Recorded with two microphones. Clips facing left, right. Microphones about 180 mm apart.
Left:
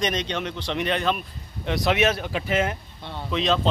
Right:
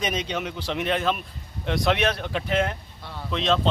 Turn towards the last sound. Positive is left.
turn(degrees=0)  # may be behind; listen again after turning